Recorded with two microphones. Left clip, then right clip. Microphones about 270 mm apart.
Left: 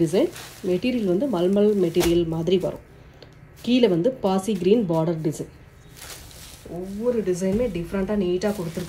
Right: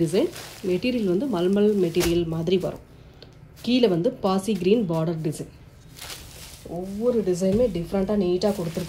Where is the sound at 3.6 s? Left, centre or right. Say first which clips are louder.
Left 1 dB; centre.